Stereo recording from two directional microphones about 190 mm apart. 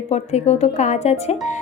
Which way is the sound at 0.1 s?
35° left (ahead or behind).